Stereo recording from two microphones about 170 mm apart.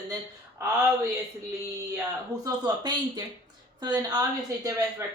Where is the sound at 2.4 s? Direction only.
25° right (ahead or behind).